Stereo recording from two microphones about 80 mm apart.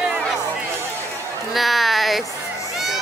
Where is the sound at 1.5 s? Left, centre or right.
Centre.